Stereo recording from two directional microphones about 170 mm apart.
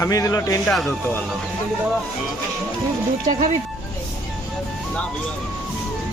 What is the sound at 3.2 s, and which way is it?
Speech, 50° right (ahead or behind).